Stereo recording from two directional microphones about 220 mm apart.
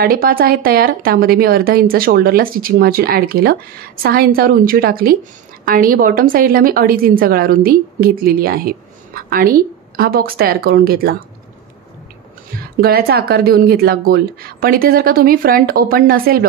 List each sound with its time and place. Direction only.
0.0 s a woman's voice: 40° right (ahead or behind)
12.8 s speech: 45° right (ahead or behind)